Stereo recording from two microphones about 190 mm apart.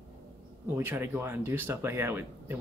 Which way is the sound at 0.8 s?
10° right (ahead or behind).